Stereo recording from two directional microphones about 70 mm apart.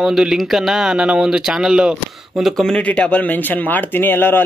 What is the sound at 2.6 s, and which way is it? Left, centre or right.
Speech, centre.